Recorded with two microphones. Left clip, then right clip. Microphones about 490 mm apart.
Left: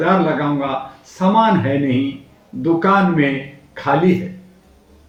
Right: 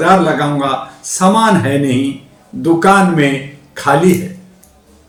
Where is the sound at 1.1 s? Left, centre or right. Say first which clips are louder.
Right 4 dB; left.